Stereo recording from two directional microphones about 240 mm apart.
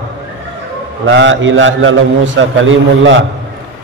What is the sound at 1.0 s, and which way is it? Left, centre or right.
A man's voice, right.